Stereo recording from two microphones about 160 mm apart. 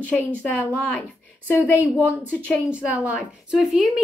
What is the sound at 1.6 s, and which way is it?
A woman's voice, 10° right (ahead or behind).